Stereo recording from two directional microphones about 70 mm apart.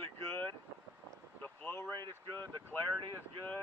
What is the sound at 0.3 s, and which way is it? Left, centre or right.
Vehicle, left.